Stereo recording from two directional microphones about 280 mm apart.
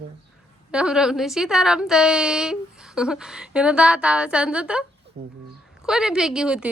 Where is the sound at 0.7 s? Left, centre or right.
Centre.